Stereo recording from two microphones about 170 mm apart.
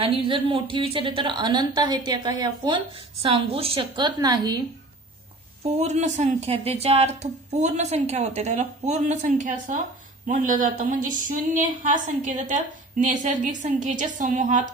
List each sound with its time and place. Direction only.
0.0 s a woman's voice: 30° right (ahead or behind)
5.8 s a woman's voice: 45° right (ahead or behind)